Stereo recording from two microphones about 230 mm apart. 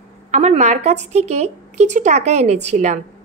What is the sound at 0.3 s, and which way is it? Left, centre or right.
A woman's voice, right.